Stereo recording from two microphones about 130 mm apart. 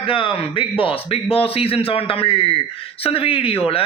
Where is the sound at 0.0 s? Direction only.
45° left (ahead or behind).